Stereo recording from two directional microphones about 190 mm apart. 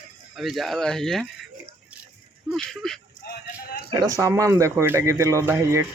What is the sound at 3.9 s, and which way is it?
Speech, 15° right (ahead or behind).